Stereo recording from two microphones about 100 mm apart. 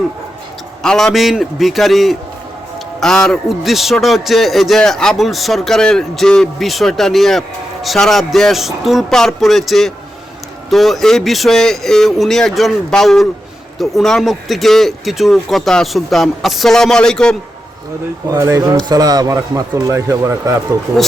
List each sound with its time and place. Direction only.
0.8 s a man's voice: 5° left (ahead or behind)
18.3 s speech: 30° right (ahead or behind)